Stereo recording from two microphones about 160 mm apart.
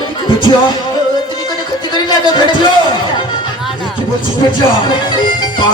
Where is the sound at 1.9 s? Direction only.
30° left (ahead or behind).